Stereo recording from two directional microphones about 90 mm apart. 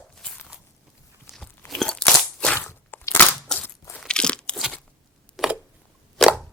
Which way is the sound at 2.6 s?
25° left (ahead or behind).